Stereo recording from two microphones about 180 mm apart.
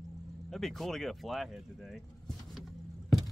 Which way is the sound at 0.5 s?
Centre (ahead or behind).